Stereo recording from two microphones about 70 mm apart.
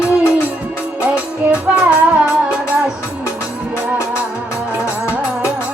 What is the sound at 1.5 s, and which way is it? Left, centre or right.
Music, centre.